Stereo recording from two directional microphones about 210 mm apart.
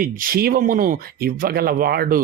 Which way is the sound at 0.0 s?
45° right (ahead or behind).